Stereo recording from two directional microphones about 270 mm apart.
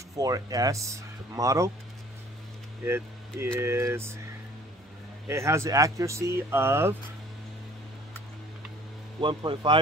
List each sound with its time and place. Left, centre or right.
0.1 s speech: centre
2.8 s speech: centre
5.3 s speech: centre
9.2 s speech: centre